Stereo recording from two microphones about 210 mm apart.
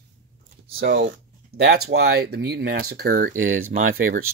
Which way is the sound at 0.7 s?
45° right (ahead or behind).